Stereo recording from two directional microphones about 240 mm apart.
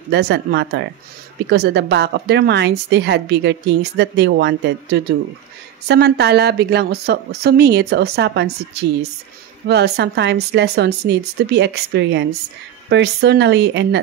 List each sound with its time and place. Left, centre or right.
0.1 s a woman's voice: right
9.7 s a woman's voice: right